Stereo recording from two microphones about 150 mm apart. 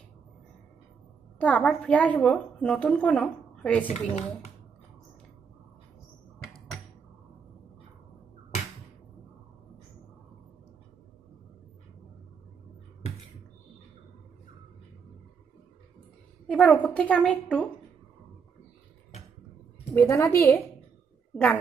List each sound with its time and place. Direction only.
1.4 s a woman's voice: 10° left (ahead or behind)
16.5 s a woman's voice: 10° left (ahead or behind)
19.9 s a woman's voice: 20° left (ahead or behind)